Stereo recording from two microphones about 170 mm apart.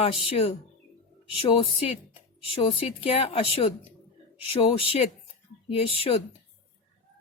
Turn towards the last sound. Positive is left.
turn(degrees=35)  # may be behind; listen again after turning